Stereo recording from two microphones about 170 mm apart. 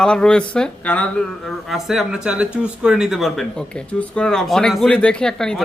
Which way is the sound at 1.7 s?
Centre (ahead or behind).